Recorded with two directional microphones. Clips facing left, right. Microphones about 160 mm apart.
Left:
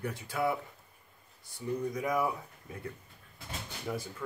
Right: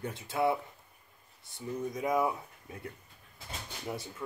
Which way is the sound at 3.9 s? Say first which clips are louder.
Left 2 dB; 25° right (ahead or behind).